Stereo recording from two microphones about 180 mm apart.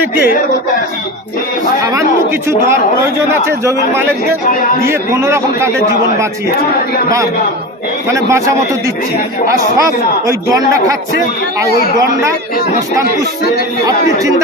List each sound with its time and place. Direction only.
1.8 s a man's voice: 20° right (ahead or behind)
3.4 s a man's voice: 15° right (ahead or behind)
8.1 s a man's voice: 15° right (ahead or behind)